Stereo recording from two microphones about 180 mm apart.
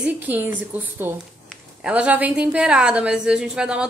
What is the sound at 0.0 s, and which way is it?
A woman's voice, 10° right (ahead or behind).